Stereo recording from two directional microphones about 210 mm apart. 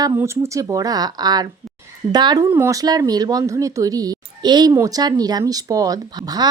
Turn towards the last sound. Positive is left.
turn(degrees=-20)  # may be behind; listen again after turning